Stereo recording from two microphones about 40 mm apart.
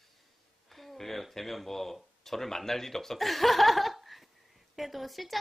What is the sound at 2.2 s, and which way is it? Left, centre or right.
Speech, centre.